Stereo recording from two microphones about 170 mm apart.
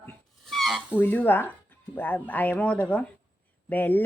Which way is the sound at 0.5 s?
Centre (ahead or behind).